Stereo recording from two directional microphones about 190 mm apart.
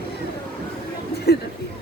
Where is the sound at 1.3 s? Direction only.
55° left (ahead or behind).